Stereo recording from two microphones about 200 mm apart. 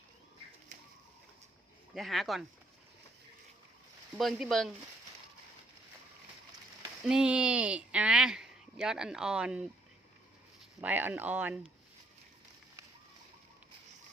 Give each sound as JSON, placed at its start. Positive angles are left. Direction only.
{"t": 0.7, "sound": "bird", "side_deg": -35}
{"t": 2.0, "sound": "speech", "side_deg": 0}
{"t": 4.2, "sound": "speech", "side_deg": 0}
{"t": 7.0, "sound": "speech", "side_deg": -5}
{"t": 10.8, "sound": "speech", "side_deg": -10}